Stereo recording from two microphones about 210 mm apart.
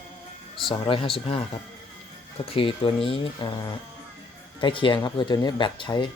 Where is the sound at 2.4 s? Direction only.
25° left (ahead or behind).